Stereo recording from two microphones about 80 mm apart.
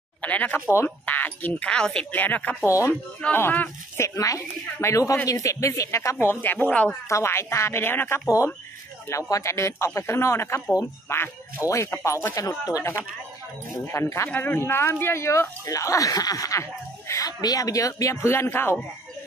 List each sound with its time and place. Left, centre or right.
0.2 s speech: centre
2.1 s speech: left
2.6 s speech: left
6.1 s speech: left
7.1 s speech: left
9.3 s speech: left
12.4 s speech: left
13.8 s speech: left